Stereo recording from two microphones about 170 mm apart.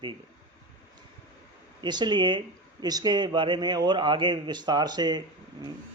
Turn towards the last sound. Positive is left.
turn(degrees=-25)  # may be behind; listen again after turning